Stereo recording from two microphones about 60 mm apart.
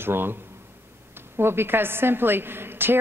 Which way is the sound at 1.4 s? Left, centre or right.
Right.